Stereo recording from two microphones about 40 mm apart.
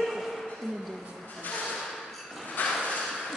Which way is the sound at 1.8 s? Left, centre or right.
Centre.